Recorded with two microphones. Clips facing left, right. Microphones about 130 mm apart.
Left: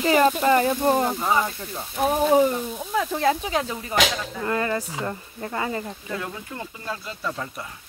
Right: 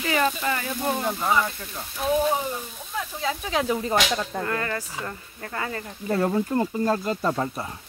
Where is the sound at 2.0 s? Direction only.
50° left (ahead or behind).